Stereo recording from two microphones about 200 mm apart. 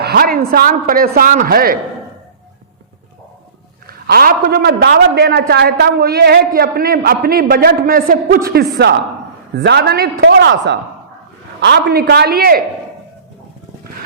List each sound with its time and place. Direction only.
0.0 s a man's voice: 50° right (ahead or behind)
3.8 s a man's voice: 50° right (ahead or behind)